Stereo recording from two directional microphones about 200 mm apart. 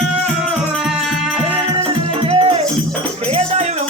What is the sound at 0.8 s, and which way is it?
Music, 5° right (ahead or behind).